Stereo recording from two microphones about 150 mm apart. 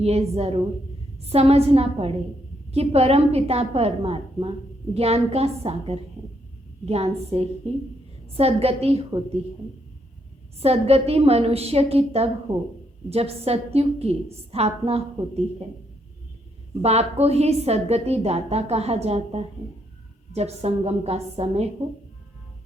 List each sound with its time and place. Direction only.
0.0 s a woman's voice: 45° right (ahead or behind)
10.6 s a woman's voice: 40° right (ahead or behind)
16.8 s a woman's voice: 45° right (ahead or behind)